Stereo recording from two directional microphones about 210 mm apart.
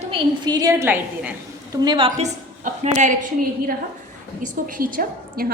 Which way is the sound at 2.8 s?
35° right (ahead or behind).